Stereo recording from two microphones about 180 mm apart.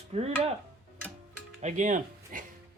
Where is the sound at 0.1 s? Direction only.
35° right (ahead or behind).